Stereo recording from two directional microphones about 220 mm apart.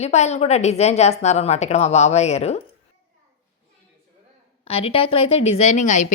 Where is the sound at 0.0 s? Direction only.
30° left (ahead or behind).